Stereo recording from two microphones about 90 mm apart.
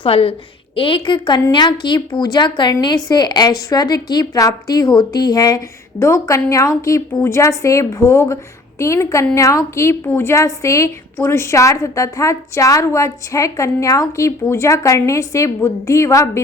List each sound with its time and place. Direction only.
0.0 s a woman's voice: 90° left
0.8 s a woman's voice: 80° left; by 5.6 s 45° left (ahead or behind)
6.0 s a woman's voice: 35° left (ahead or behind)